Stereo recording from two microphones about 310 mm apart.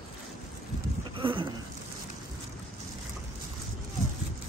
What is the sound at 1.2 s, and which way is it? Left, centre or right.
Speech, centre.